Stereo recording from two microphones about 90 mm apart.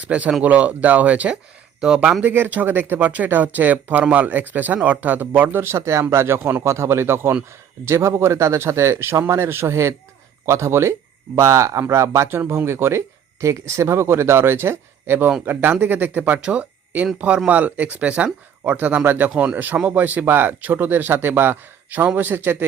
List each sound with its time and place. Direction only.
0.0 s speech: 15° right (ahead or behind)
2.2 s speech: 20° right (ahead or behind)